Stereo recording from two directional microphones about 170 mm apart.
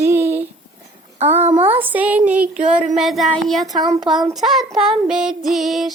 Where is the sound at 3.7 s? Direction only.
20° right (ahead or behind).